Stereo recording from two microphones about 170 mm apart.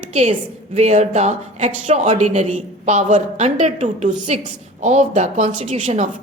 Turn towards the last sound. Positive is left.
turn(degrees=-45)  # may be behind; listen again after turning